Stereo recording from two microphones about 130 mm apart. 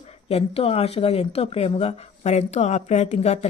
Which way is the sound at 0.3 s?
50° left (ahead or behind).